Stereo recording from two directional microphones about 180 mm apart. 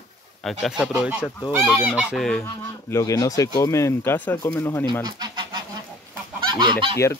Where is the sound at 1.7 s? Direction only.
10° right (ahead or behind).